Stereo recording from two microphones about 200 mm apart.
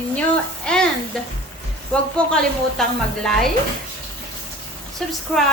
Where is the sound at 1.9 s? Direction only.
5° left (ahead or behind).